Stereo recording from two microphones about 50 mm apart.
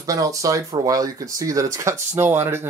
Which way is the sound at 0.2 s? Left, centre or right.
Right.